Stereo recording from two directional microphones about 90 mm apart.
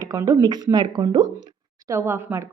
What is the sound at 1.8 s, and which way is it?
Speech, 30° right (ahead or behind).